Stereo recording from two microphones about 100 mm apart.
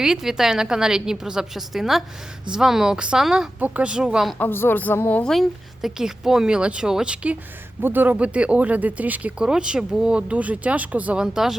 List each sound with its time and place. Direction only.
0.0 s a woman's voice: 5° right (ahead or behind)
4.4 s a woman's voice: 20° left (ahead or behind)
5.3 s speech: centre (ahead or behind)